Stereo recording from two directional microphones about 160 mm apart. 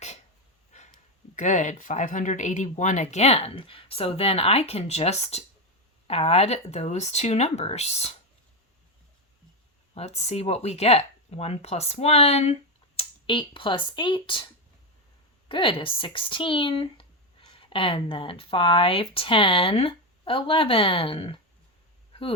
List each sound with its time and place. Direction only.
1.4 s speech: 50° left (ahead or behind)
9.9 s speech: 45° left (ahead or behind)
15.4 s speech: 30° left (ahead or behind)
22.1 s a sound: 35° left (ahead or behind)